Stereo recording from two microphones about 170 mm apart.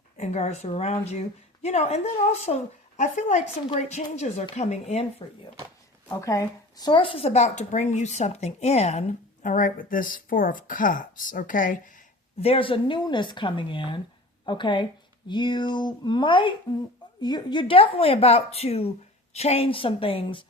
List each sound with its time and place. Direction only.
0.2 s a woman's voice: 40° left (ahead or behind)
6.1 s a woman's voice: 15° left (ahead or behind)